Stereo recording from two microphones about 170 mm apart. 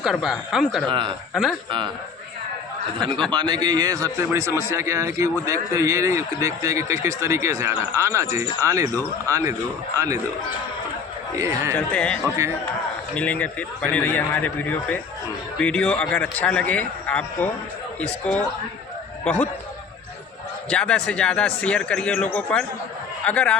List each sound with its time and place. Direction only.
0.0 s speech: centre (ahead or behind)
0.9 s a man's voice: 30° right (ahead or behind)
1.3 s speech: centre (ahead or behind)
3.3 s a man's voice: 25° right (ahead or behind)
11.3 s speech: 15° right (ahead or behind)
11.9 s a man's voice: 5° left (ahead or behind)
20.7 s a man's voice: 5° left (ahead or behind)